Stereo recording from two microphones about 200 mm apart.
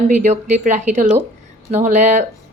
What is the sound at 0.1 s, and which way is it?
Speech, 35° right (ahead or behind).